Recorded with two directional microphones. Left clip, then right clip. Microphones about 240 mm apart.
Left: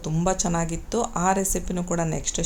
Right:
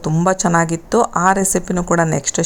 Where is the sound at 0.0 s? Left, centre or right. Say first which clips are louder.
Right 9 dB; right.